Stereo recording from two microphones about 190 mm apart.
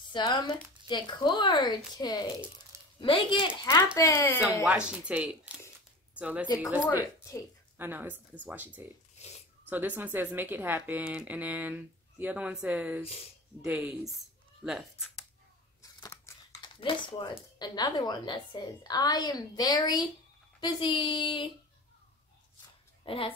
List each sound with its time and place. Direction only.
0.1 s a woman's voice: 20° left (ahead or behind)
3.6 s speech: 15° left (ahead or behind)
4.6 s speech: 5° right (ahead or behind)
15.8 s scissors: 15° left (ahead or behind)
16.8 s a woman's voice: 25° left (ahead or behind)
23.0 s speech: 30° left (ahead or behind)